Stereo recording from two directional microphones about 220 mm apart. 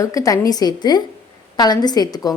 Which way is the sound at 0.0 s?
15° left (ahead or behind).